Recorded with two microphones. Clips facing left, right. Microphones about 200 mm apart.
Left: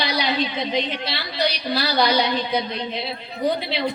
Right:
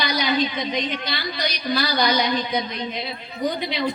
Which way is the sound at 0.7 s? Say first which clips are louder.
Left 1 dB; 30° left (ahead or behind).